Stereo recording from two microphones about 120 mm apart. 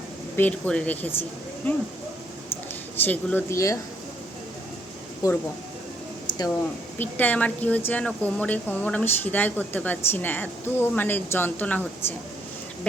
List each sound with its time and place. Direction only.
0.3 s speech: 15° left (ahead or behind)
3.0 s speech: 15° left (ahead or behind)
5.2 s speech: 30° left (ahead or behind)
6.2 s a sound: 35° left (ahead or behind)
7.0 s speech: 15° left (ahead or behind)